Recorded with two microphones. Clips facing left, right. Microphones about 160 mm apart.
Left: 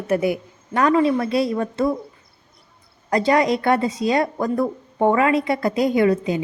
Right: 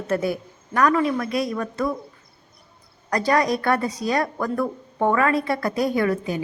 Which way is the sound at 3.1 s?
20° left (ahead or behind).